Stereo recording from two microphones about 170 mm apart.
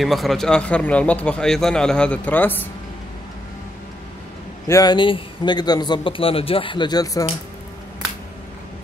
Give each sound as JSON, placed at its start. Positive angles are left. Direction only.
{"t": 0.0, "sound": "a man's voice", "side_deg": 0}
{"t": 4.6, "sound": "a man's voice", "side_deg": 20}